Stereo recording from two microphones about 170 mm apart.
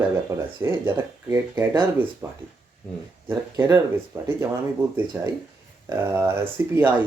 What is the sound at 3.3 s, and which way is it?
Speech, 20° right (ahead or behind).